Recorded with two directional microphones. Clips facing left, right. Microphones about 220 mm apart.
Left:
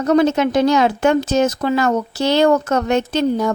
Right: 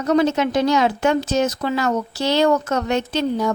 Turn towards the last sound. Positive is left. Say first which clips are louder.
# left 3 dB
turn(degrees=50)  # may be behind; listen again after turning